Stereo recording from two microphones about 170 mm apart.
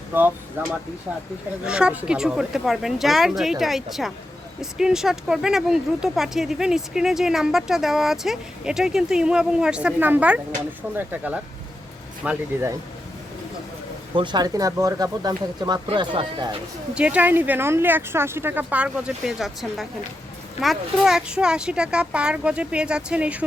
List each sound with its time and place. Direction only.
0.6 s speech: 15° right (ahead or behind)
14.2 s speech: 25° right (ahead or behind)
16.9 s speech: 5° right (ahead or behind)